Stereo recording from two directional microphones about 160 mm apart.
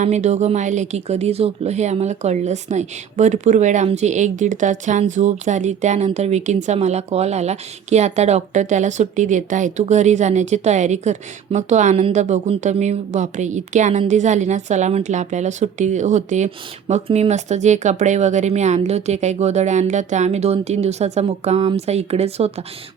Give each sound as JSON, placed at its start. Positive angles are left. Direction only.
{"t": 0.0, "sound": "speech", "side_deg": -45}